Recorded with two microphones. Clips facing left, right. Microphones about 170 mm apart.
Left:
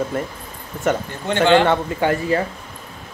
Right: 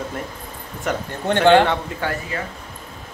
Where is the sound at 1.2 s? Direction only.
55° right (ahead or behind).